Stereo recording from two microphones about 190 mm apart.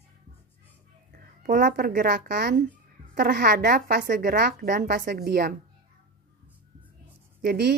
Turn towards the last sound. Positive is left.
turn(degrees=-55)  # may be behind; listen again after turning